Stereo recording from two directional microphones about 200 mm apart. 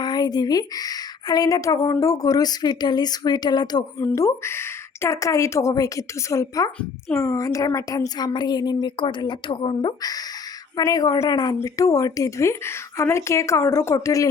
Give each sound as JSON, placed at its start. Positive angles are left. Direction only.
{"t": 0.0, "sound": "speech", "side_deg": 20}